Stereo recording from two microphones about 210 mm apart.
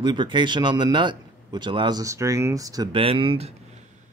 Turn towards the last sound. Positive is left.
turn(degrees=-25)  # may be behind; listen again after turning